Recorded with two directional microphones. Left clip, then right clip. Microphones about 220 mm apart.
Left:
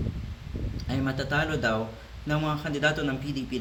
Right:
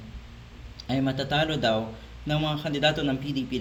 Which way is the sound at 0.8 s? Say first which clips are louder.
Right 3 dB; 15° right (ahead or behind).